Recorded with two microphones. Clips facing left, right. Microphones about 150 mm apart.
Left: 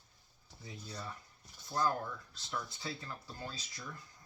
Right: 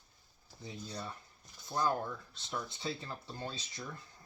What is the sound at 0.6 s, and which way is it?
Speech, 25° right (ahead or behind).